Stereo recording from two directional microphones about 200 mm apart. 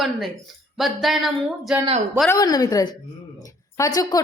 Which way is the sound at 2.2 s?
20° left (ahead or behind).